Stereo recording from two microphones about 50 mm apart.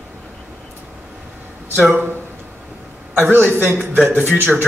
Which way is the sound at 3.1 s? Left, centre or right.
Right.